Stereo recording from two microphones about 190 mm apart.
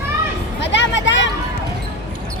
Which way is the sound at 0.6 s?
70° left (ahead or behind).